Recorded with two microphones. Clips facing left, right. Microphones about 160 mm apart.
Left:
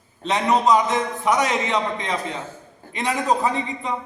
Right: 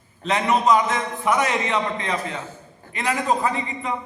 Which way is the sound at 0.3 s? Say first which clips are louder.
Left 1 dB; centre (ahead or behind).